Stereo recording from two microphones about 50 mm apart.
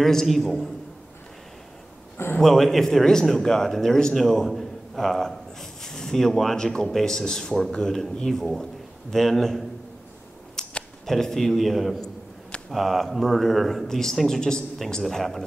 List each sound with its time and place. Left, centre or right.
0.0 s speech: centre
2.4 s speech: centre
10.6 s a sound: centre
11.1 s speech: centre
12.0 s a sound: centre
12.6 s speech: centre